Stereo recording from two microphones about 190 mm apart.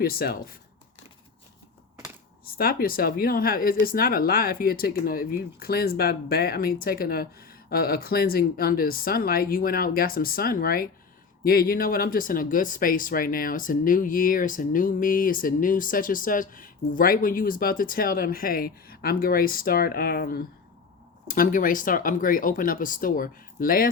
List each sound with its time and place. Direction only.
0.0 s speech: 55° left (ahead or behind)
2.4 s speech: 50° left (ahead or behind)